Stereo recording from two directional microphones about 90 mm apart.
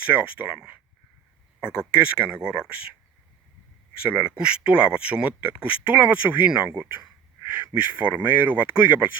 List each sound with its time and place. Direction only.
0.0 s speech: 15° right (ahead or behind)
4.0 s speech: 15° right (ahead or behind)
6.7 s speech: 25° right (ahead or behind)